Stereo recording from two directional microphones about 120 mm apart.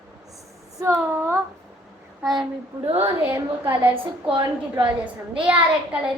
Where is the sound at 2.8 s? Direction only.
55° right (ahead or behind).